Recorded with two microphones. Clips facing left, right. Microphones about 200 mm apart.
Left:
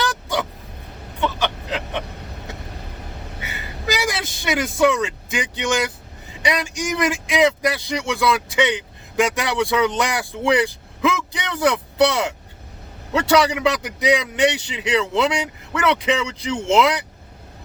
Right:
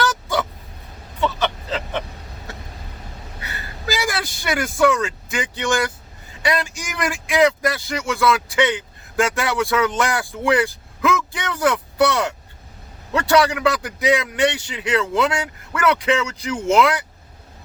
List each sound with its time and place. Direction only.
1.2 s vehicle: 15° left (ahead or behind)
3.4 s vehicle: 20° left (ahead or behind)
6.4 s speech: 20° left (ahead or behind)